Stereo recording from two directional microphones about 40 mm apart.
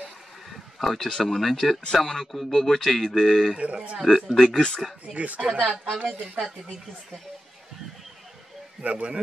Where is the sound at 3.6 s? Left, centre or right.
Right.